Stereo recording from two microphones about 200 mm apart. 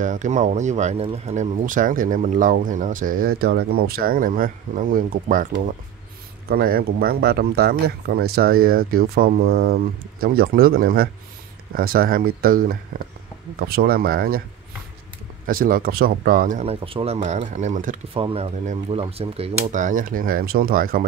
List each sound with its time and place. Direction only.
0.0 s speech: 40° right (ahead or behind)
15.4 s speech: 45° right (ahead or behind)
16.8 s speech: 30° right (ahead or behind)
18.1 s speech: 30° right (ahead or behind); by 21.0 s 45° right (ahead or behind)